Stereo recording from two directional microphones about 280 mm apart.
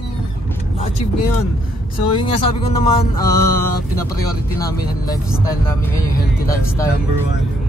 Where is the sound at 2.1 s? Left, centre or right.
Centre.